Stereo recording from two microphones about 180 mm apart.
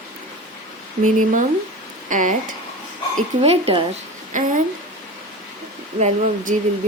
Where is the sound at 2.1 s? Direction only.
45° right (ahead or behind).